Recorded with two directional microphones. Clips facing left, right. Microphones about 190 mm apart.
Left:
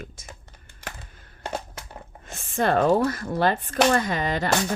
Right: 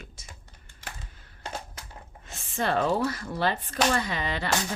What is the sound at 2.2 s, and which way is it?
Speech, 50° left (ahead or behind).